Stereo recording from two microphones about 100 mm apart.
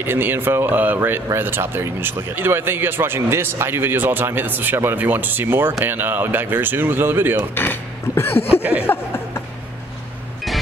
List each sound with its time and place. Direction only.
0.0 s speech: 20° right (ahead or behind)
7.5 s speech: 20° left (ahead or behind)
8.8 s a sound: 25° left (ahead or behind)